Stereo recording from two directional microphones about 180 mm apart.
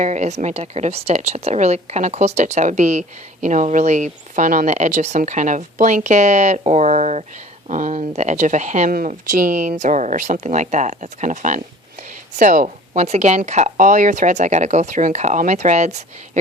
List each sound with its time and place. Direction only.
0.0 s a woman's voice: 40° right (ahead or behind)